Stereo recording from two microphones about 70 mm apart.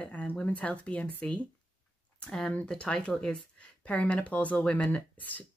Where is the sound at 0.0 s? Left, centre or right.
Centre.